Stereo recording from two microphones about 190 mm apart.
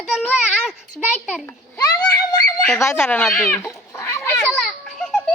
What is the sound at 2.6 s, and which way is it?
Chicken, 10° left (ahead or behind).